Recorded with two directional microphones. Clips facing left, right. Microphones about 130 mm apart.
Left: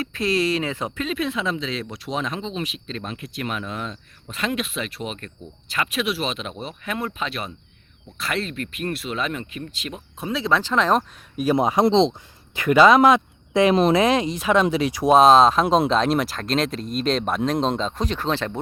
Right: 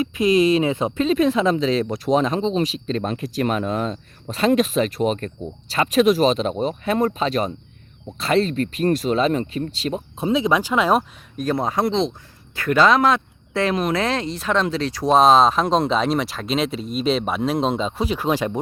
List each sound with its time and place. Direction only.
0.0 s speech: 15° right (ahead or behind)
11.5 s speech: 15° left (ahead or behind)
12.5 s speech: 10° left (ahead or behind); by 18.6 s 10° right (ahead or behind)